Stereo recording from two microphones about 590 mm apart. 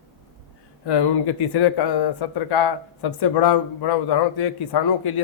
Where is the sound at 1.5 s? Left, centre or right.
Left.